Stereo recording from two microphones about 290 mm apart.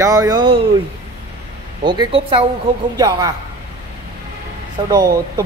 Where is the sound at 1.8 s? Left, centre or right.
Centre.